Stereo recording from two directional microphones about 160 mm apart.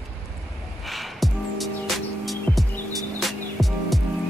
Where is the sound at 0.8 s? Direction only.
Centre (ahead or behind).